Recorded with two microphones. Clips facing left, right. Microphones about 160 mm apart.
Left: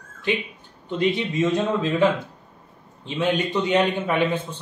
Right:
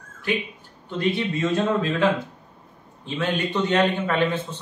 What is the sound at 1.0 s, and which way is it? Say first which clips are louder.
A man's voice: left 2 dB; 15° left (ahead or behind).